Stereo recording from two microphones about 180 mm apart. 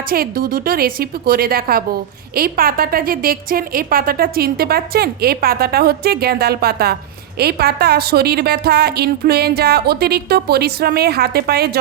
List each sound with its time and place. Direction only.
0.1 s a woman's voice: 55° right (ahead or behind)